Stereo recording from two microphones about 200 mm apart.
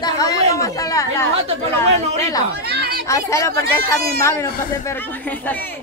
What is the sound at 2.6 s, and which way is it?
Chatter, 55° right (ahead or behind).